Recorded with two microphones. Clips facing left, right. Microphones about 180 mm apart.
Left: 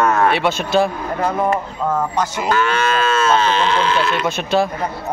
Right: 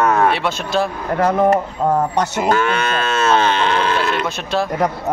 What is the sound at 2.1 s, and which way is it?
Moo, 55° right (ahead or behind).